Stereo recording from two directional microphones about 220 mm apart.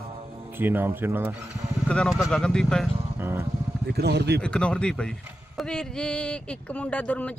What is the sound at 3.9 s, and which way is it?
Speech, 45° right (ahead or behind).